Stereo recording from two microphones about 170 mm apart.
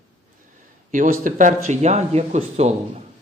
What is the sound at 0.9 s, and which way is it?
A man's voice, 50° right (ahead or behind).